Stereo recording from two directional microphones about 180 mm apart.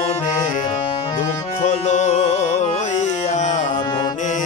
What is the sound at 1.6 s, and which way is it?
Music, 40° left (ahead or behind).